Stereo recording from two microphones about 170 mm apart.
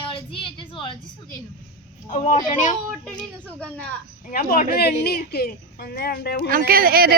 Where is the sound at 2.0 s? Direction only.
45° left (ahead or behind).